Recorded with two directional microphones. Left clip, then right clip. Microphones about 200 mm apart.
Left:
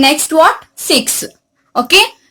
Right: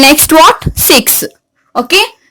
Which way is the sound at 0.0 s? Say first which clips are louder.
Right 5 dB; 45° right (ahead or behind).